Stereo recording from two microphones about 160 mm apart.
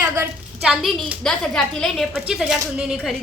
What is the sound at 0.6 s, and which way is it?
A woman's voice, 5° right (ahead or behind).